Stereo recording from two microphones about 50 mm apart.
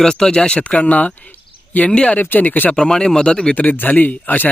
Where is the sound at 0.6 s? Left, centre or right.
Left.